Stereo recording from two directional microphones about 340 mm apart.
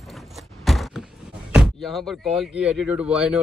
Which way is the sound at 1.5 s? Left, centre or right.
Centre.